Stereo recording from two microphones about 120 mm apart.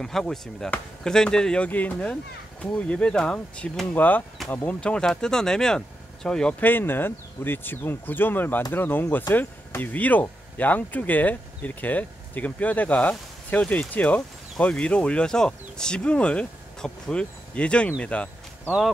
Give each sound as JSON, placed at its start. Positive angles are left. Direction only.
{"t": 0.0, "sound": "speech", "side_deg": 5}